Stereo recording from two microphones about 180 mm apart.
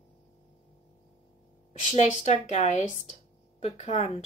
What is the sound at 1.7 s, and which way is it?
Speech, 40° left (ahead or behind).